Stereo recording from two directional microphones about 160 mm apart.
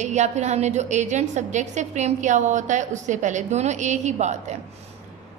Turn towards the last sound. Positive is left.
turn(degrees=-45)  # may be behind; listen again after turning